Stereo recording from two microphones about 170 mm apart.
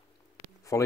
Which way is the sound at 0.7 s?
15° left (ahead or behind).